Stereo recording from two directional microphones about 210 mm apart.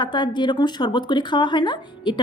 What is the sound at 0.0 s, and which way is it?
Speech, 20° left (ahead or behind).